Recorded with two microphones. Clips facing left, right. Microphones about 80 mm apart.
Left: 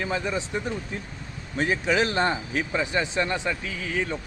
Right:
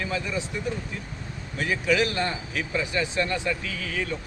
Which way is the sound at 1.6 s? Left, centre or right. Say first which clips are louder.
Left 1 dB; left.